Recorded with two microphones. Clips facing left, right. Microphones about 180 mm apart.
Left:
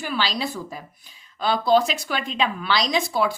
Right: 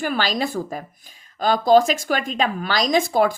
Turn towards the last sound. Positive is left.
turn(degrees=-45)  # may be behind; listen again after turning